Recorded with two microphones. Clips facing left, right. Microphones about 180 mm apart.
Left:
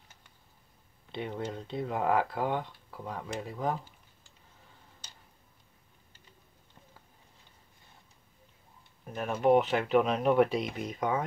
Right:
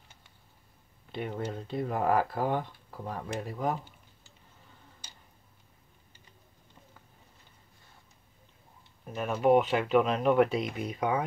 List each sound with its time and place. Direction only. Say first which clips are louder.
1.1 s speech: right 1 dB; 5° right (ahead or behind)
9.0 s speech: right 1 dB; centre (ahead or behind)